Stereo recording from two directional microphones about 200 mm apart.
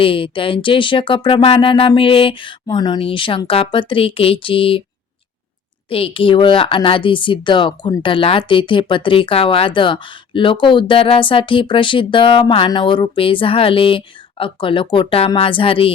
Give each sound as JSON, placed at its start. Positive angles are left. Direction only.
{"t": 0.0, "sound": "speech", "side_deg": 25}
{"t": 5.9, "sound": "speech", "side_deg": 25}